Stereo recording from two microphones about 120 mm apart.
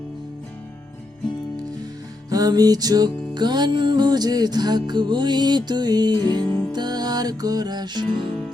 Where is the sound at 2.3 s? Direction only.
30° right (ahead or behind).